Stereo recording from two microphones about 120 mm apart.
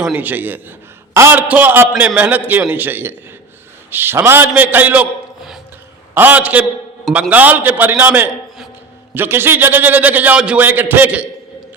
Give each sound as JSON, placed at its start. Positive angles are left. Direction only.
{"t": 0.0, "sound": "a man's voice", "side_deg": -15}